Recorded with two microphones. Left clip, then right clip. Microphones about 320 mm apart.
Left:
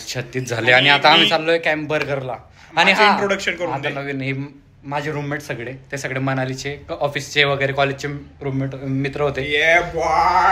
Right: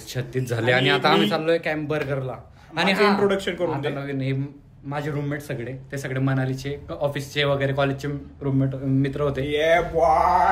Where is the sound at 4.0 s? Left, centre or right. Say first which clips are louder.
Left 4 dB; centre.